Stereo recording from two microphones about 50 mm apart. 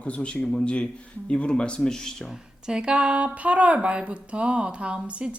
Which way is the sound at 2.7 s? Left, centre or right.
Centre.